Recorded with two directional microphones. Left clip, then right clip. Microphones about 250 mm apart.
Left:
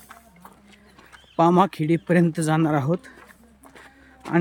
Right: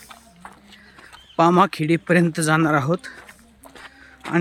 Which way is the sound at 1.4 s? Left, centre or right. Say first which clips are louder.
Right 2 dB; centre.